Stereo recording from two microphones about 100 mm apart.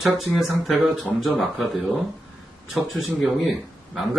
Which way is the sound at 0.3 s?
Centre (ahead or behind).